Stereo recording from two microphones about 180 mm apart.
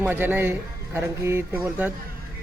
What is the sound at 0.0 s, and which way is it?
Speech, 10° right (ahead or behind).